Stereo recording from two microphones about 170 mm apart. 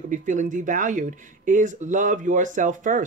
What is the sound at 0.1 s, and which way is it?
Speech, 50° right (ahead or behind).